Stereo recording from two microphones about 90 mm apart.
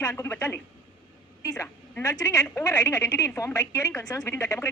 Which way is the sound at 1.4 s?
40° left (ahead or behind).